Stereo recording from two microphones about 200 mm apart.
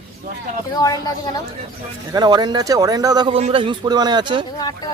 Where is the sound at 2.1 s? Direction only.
20° right (ahead or behind).